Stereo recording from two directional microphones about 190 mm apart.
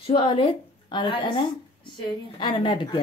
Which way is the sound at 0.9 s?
25° left (ahead or behind).